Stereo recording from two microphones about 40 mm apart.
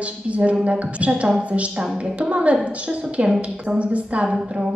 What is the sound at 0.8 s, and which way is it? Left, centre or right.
A woman's voice, right.